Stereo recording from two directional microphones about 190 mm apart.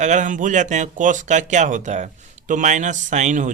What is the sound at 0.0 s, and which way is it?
Speech, 40° right (ahead or behind).